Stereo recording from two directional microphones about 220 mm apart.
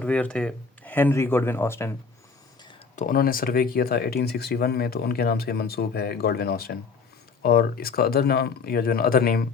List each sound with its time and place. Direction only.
0.0 s speech: 5° left (ahead or behind)
2.9 s speech: 35° left (ahead or behind)